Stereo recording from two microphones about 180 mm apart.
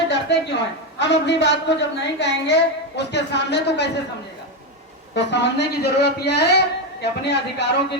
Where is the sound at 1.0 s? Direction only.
70° left (ahead or behind).